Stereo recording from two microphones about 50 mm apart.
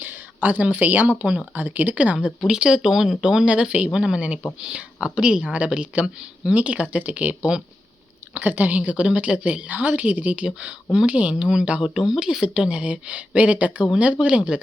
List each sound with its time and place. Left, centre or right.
0.0 s speech: right
2.6 s a woman's voice: centre
11.9 s speech: centre
12.7 s a woman's voice: right